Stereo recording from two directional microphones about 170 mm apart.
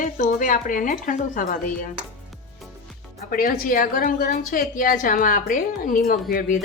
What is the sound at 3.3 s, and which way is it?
Speech, 55° left (ahead or behind).